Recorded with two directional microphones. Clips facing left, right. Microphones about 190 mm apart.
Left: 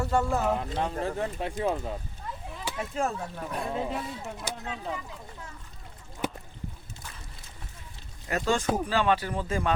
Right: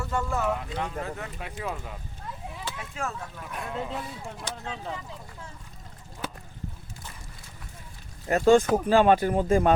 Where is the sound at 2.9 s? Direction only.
35° left (ahead or behind).